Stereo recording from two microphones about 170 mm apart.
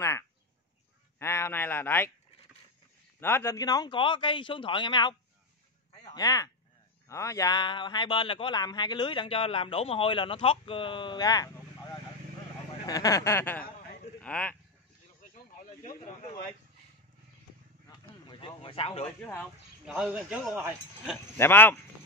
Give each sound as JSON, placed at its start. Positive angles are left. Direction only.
{"t": 1.2, "sound": "a sound", "side_deg": 15}
{"t": 3.2, "sound": "a man's voice", "side_deg": 15}
{"t": 12.8, "sound": "speech", "side_deg": 20}
{"t": 18.3, "sound": "speech", "side_deg": 30}
{"t": 19.9, "sound": "speech", "side_deg": -5}
{"t": 21.4, "sound": "speech", "side_deg": 10}